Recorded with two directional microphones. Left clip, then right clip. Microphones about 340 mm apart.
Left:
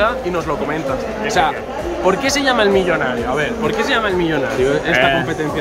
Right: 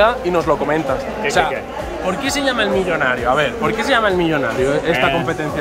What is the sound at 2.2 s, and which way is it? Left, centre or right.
Speech, centre.